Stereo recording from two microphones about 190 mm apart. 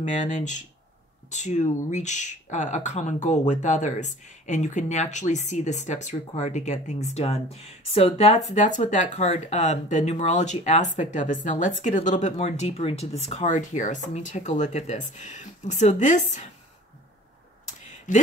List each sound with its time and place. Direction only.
0.0 s speech: 40° left (ahead or behind)
18.1 s speech: 40° left (ahead or behind)